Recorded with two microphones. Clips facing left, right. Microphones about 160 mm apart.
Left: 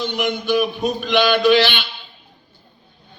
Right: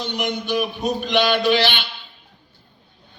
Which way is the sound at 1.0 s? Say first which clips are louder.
Left 2 dB; 55° left (ahead or behind).